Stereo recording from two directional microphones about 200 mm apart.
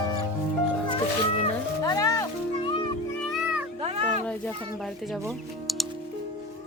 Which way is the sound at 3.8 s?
30° right (ahead or behind).